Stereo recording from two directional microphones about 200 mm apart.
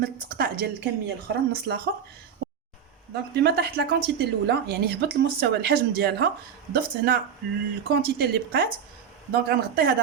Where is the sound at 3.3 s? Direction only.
55° right (ahead or behind).